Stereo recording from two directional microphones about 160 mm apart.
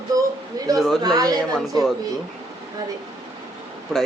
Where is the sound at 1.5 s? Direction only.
Centre (ahead or behind).